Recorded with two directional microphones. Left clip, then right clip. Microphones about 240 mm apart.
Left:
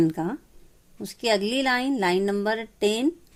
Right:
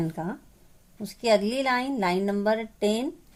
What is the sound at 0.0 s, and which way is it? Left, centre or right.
A woman's voice, left.